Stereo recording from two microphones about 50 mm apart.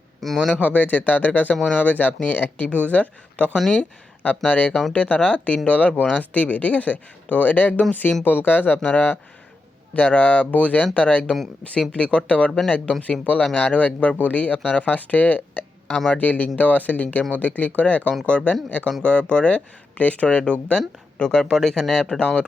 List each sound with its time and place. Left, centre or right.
0.2 s speech: centre
0.6 s speech: left
4.7 s speech: centre
4.9 s speech: left
9.9 s speech: left; by 22.4 s centre